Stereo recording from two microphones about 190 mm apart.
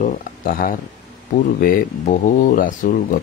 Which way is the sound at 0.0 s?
50° left (ahead or behind).